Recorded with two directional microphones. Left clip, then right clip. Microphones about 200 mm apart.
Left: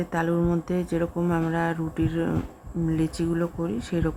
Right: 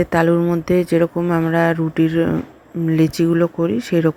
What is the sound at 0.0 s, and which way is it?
Speech, 20° right (ahead or behind).